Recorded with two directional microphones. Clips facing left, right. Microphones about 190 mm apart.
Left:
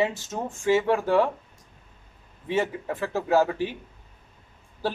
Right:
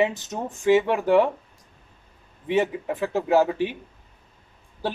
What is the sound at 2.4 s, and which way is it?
Speech, 15° right (ahead or behind).